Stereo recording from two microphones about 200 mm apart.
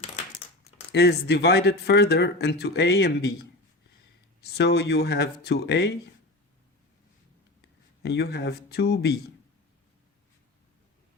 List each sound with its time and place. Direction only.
0.9 s speech: 55° left (ahead or behind)
4.5 s speech: 55° left (ahead or behind)
8.0 s speech: 55° left (ahead or behind)